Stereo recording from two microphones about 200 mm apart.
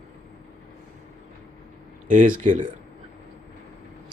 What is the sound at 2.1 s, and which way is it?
Speech, 40° right (ahead or behind).